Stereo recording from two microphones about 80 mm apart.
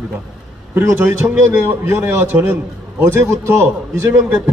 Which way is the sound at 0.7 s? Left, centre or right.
Right.